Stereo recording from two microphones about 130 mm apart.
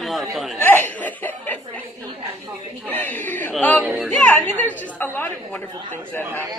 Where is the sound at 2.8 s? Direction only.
15° left (ahead or behind).